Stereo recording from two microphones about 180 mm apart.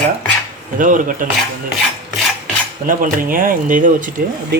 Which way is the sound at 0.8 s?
45° right (ahead or behind).